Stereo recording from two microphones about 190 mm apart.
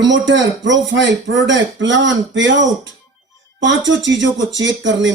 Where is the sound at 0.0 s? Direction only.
70° right (ahead or behind).